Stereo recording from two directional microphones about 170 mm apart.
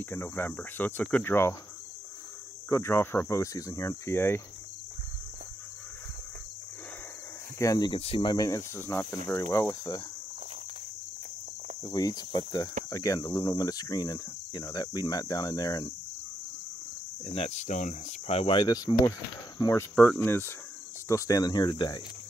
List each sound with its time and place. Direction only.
0.0 s cricket: 10° left (ahead or behind)
2.7 s cricket: 15° left (ahead or behind)
7.5 s cricket: 20° left (ahead or behind)
8.5 s cricket: 15° left (ahead or behind)
11.9 s cricket: 20° left (ahead or behind)
17.2 s speech: 35° left (ahead or behind)
19.6 s cricket: 15° left (ahead or behind)